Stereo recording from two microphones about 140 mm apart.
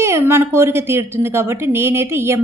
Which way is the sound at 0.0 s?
20° right (ahead or behind).